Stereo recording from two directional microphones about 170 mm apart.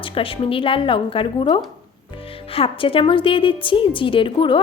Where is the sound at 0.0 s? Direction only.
30° left (ahead or behind).